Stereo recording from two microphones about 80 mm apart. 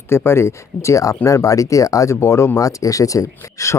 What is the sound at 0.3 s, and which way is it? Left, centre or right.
Speech, left.